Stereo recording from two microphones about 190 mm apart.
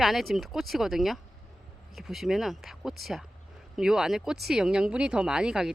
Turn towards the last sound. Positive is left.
turn(degrees=-5)  # may be behind; listen again after turning